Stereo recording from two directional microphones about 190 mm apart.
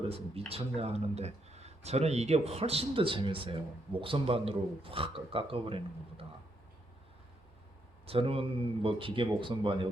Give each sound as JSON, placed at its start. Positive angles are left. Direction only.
{"t": 0.1, "sound": "speech", "side_deg": -30}
{"t": 8.0, "sound": "speech", "side_deg": -30}